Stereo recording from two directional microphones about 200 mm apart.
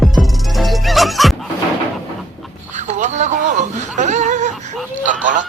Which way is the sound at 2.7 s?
35° right (ahead or behind).